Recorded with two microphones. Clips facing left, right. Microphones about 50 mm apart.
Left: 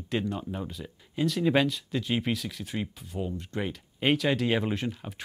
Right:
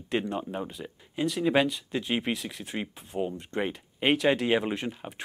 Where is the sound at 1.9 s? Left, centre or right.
Right.